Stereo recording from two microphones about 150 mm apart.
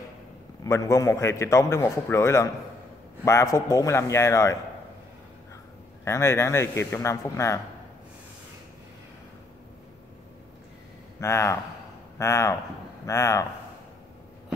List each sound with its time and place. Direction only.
0.7 s a man's voice: 20° left (ahead or behind)
6.0 s a man's voice: 20° left (ahead or behind)
11.1 s a man's voice: 20° left (ahead or behind)